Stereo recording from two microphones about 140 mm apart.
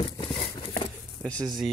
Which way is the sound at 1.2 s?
5° left (ahead or behind).